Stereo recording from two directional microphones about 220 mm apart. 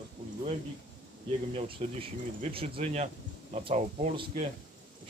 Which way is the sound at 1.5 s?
25° right (ahead or behind).